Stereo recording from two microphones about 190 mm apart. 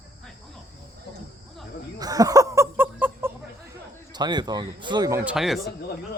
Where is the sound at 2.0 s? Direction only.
20° right (ahead or behind).